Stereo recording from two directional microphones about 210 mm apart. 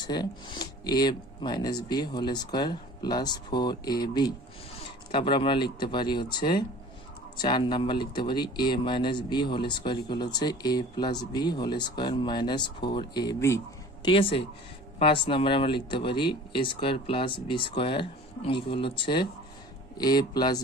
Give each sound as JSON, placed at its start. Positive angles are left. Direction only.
{"t": 0.0, "sound": "speech", "side_deg": 20}
{"t": 7.4, "sound": "speech", "side_deg": 20}